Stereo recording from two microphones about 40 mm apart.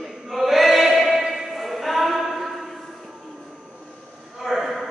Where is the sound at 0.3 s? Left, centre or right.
Centre.